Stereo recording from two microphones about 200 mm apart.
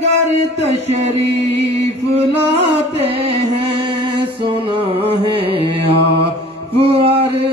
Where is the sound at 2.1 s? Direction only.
30° right (ahead or behind).